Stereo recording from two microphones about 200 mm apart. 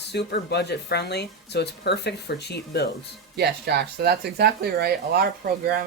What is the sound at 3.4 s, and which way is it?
Speech, 55° right (ahead or behind).